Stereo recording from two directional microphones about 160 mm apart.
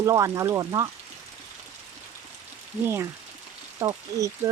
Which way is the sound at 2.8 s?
15° right (ahead or behind).